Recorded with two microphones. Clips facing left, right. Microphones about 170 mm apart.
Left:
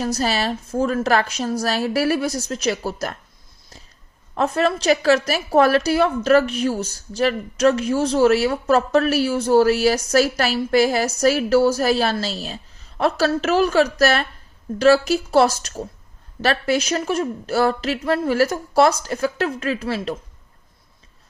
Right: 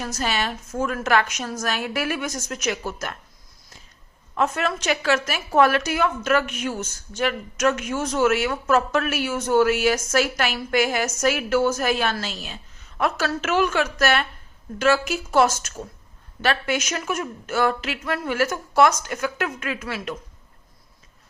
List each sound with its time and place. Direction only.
0.0 s a woman's voice: 35° left (ahead or behind)
4.4 s a woman's voice: 35° left (ahead or behind)